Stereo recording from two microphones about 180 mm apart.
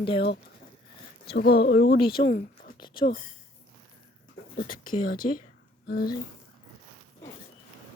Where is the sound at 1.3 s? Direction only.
60° left (ahead or behind).